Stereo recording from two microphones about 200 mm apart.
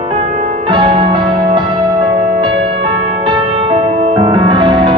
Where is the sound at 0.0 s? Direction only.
30° right (ahead or behind).